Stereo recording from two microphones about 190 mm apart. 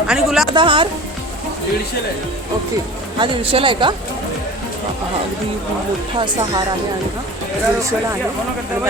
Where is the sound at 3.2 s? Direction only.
30° right (ahead or behind).